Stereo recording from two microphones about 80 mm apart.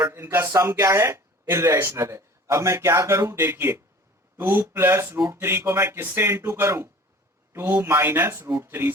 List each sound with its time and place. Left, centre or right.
0.1 s speech: right
5.1 s speech: right
5.4 s speech: right